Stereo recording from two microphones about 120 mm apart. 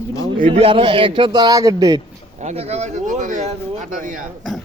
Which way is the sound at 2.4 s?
70° right (ahead or behind).